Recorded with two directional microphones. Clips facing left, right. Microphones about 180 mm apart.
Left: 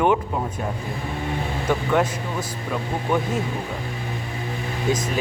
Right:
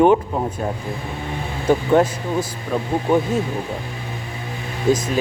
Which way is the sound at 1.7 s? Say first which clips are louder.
Right 6 dB; 30° right (ahead or behind).